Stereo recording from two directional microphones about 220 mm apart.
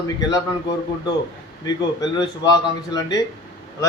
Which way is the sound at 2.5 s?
15° left (ahead or behind).